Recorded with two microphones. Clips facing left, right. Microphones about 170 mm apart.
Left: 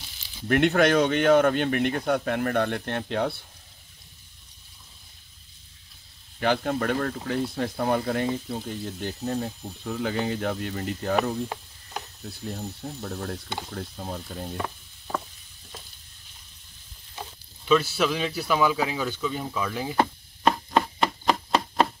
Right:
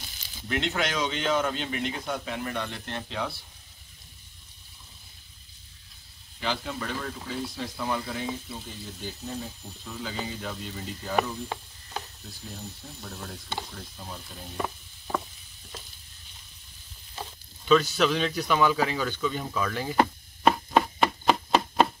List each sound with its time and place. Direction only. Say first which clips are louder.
0.5 s speech: left 9 dB; 60° left (ahead or behind)
6.4 s speech: left 8 dB; 55° left (ahead or behind)
14.6 s sizzle: right 1 dB; 5° right (ahead or behind)
17.6 s a sound: even; 5° left (ahead or behind)